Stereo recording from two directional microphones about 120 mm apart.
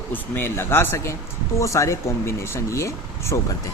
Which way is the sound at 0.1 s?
20° left (ahead or behind).